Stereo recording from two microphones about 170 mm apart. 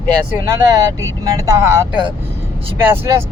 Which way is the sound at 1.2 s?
15° right (ahead or behind).